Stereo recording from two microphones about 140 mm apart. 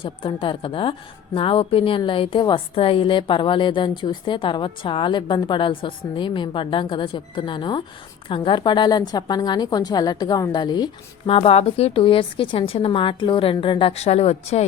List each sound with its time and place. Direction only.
0.0 s a woman's voice: 35° left (ahead or behind)
11.3 s a woman's voice: 40° left (ahead or behind)